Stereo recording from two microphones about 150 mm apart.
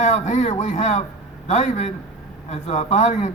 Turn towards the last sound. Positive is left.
turn(degrees=50)  # may be behind; listen again after turning